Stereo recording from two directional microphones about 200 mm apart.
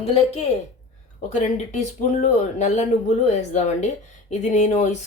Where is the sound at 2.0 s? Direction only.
35° left (ahead or behind).